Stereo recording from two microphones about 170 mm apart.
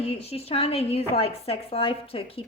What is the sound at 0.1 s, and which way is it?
Speech, 35° left (ahead or behind).